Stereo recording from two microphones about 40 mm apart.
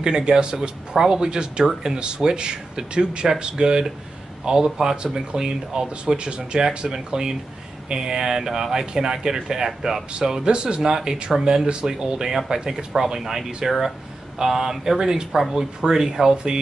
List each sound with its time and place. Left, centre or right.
0.0 s speech: centre